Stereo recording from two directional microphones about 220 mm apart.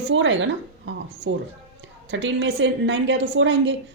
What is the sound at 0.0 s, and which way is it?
Speech, 55° right (ahead or behind).